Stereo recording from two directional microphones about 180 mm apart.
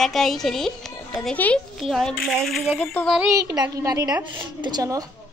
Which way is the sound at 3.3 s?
20° right (ahead or behind).